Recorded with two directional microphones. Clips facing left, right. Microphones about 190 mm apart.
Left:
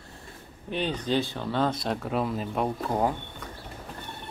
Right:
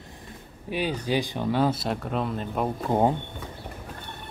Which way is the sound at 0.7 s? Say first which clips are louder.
Right 1 dB; 10° right (ahead or behind).